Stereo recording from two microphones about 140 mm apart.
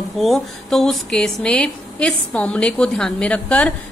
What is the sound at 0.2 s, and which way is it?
A woman's voice, centre (ahead or behind).